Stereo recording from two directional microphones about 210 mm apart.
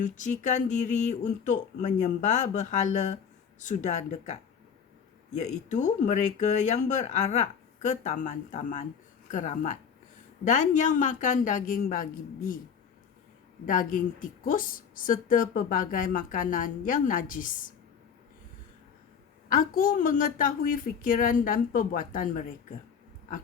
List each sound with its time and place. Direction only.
0.0 s a woman's voice: 35° left (ahead or behind)
5.4 s a woman's voice: 35° left (ahead or behind)
13.7 s a woman's voice: 40° left (ahead or behind)
19.5 s a woman's voice: 40° left (ahead or behind)